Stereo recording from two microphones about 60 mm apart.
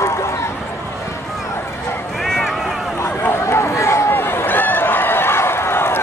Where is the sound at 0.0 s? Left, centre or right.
Left.